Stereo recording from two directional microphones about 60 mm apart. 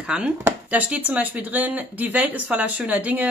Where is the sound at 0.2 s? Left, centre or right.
Right.